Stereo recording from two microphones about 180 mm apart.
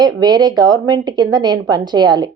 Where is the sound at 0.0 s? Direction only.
25° right (ahead or behind).